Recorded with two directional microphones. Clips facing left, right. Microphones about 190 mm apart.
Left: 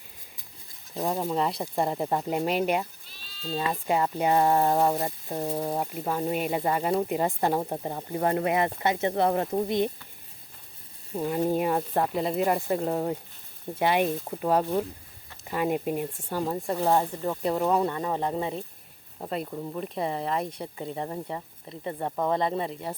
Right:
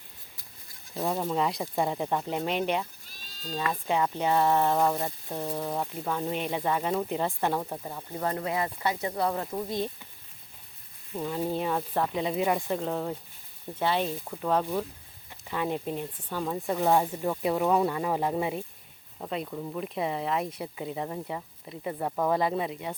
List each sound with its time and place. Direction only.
1.0 s speech: 10° left (ahead or behind)
3.1 s bleat: 45° right (ahead or behind)
3.7 s speech: 5° left (ahead or behind)
5.5 s speech: 30° left (ahead or behind)
5.8 s speech: 10° left (ahead or behind)
7.6 s speech: 35° left (ahead or behind)
8.2 s speech: 55° left (ahead or behind)
8.8 s speech: 20° left (ahead or behind)
9.6 s speech: 20° left (ahead or behind)
11.1 s speech: 15° left (ahead or behind)
12.1 s speech: centre (ahead or behind)
19.5 s speech: 10° left (ahead or behind)
19.8 s speech: centre (ahead or behind)